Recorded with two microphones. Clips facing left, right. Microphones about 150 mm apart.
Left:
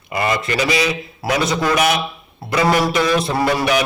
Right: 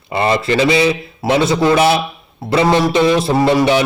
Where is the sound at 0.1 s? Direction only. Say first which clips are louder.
Right 5 dB; 30° right (ahead or behind).